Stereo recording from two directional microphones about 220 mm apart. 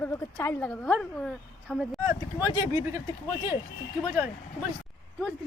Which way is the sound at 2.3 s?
15° left (ahead or behind).